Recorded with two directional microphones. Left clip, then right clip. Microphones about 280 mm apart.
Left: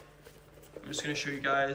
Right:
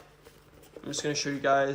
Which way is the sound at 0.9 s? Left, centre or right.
Centre.